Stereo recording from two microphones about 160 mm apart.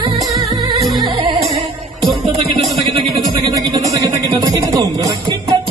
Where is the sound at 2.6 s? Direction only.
Centre (ahead or behind).